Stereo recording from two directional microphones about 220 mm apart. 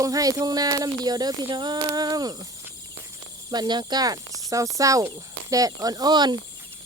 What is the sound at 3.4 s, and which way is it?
Speech, 20° right (ahead or behind).